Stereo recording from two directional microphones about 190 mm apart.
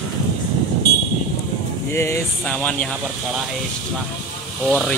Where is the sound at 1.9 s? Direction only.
15° left (ahead or behind).